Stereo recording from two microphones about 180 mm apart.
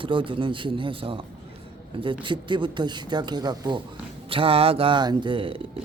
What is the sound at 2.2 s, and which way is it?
A man's voice, 25° right (ahead or behind).